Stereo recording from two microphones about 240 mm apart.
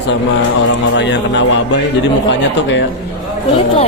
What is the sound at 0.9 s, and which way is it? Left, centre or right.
A man's voice, left.